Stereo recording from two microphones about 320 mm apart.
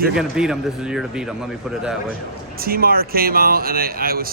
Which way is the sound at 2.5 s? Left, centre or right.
Right.